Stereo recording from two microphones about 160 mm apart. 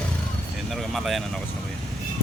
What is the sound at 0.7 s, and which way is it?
Speech, centre (ahead or behind).